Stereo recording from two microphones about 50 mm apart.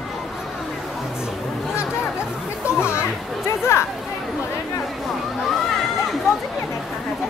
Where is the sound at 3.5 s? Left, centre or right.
Left.